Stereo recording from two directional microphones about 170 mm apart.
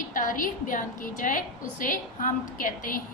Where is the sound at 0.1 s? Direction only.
50° left (ahead or behind).